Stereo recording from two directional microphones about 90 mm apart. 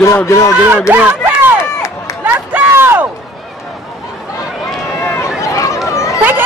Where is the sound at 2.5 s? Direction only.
25° right (ahead or behind).